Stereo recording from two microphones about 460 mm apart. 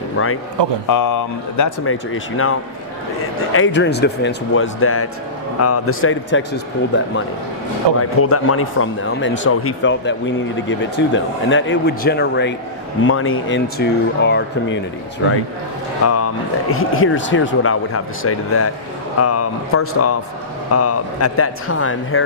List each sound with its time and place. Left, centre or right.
0.2 s speech: left
0.9 s speech: left
7.8 s speech: right
8.2 s speech: left
16.0 s speech: left